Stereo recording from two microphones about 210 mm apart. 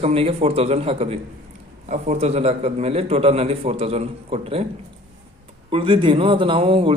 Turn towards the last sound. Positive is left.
turn(degrees=-25)  # may be behind; listen again after turning